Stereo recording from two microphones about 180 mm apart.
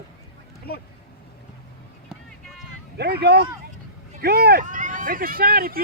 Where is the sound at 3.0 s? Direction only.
65° right (ahead or behind).